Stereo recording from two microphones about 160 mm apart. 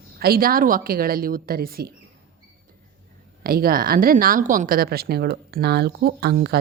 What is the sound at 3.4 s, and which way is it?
A woman's voice, 65° right (ahead or behind).